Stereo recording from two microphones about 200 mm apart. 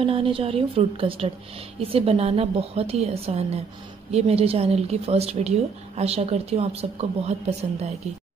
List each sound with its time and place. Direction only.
0.0 s a woman's voice: 25° right (ahead or behind)